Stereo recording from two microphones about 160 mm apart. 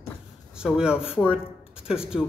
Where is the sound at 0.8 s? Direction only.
5° right (ahead or behind).